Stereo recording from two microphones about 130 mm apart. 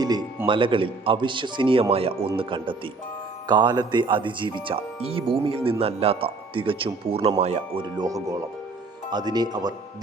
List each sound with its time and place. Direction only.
0.4 s a man's voice: 40° right (ahead or behind); by 7.8 s 55° right (ahead or behind)
7.8 s a man's voice: 30° right (ahead or behind)